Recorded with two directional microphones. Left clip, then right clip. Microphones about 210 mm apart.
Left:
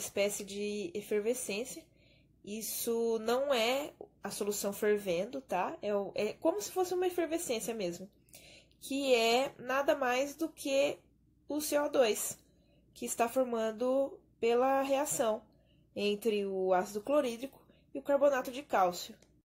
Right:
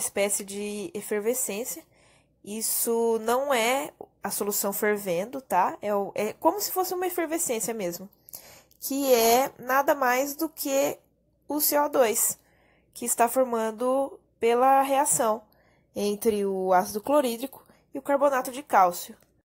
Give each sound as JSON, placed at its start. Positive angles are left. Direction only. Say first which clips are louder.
{"t": 0.0, "sound": "speech", "louder": "right 6 dB", "side_deg": -25}
{"t": 8.5, "sound": "a sound", "louder": "right 7 dB", "side_deg": -90}
{"t": 9.6, "sound": "speech", "louder": "right 8 dB", "side_deg": -30}
{"t": 15.9, "sound": "a woman's voice", "louder": "right 6 dB", "side_deg": -40}
{"t": 17.9, "sound": "speech", "louder": "right 5 dB", "side_deg": -20}